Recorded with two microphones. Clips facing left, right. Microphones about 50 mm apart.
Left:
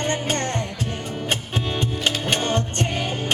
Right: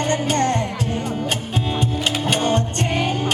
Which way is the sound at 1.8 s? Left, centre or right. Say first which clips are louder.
Right 1 dB; left.